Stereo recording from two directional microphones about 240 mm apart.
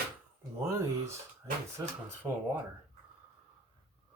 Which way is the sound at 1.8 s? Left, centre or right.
Centre.